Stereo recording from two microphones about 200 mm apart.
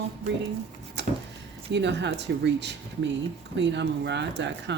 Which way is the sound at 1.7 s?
60° right (ahead or behind).